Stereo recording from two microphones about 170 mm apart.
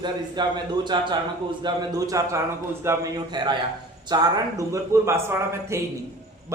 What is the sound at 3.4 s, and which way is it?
A man's voice, 25° right (ahead or behind).